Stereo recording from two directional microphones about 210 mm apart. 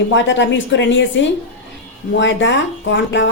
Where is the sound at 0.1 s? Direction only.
60° left (ahead or behind).